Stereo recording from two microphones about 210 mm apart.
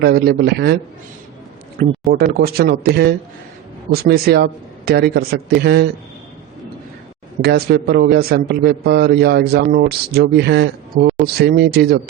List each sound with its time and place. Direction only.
0.0 s a man's voice: 50° right (ahead or behind)
1.8 s a man's voice: 45° right (ahead or behind)
7.4 s a man's voice: 50° right (ahead or behind)